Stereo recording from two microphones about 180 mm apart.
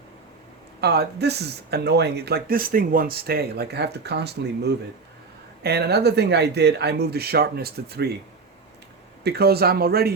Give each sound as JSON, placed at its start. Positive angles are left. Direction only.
{"t": 0.8, "sound": "speech", "side_deg": -65}
{"t": 9.2, "sound": "speech", "side_deg": -60}